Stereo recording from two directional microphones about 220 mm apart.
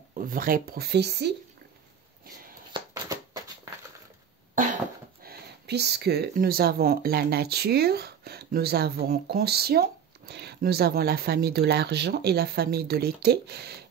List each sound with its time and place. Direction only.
0.3 s speech: 40° right (ahead or behind)
2.7 s a sound: 15° right (ahead or behind)
5.2 s speech: 50° right (ahead or behind)